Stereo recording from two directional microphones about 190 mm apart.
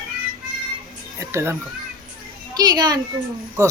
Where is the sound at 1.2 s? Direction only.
15° right (ahead or behind).